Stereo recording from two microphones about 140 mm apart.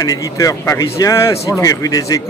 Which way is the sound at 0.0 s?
25° left (ahead or behind).